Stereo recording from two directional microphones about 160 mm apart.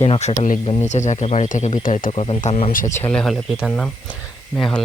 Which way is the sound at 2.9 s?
10° left (ahead or behind).